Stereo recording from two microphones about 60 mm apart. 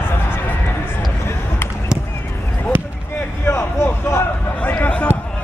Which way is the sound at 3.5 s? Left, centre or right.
Left.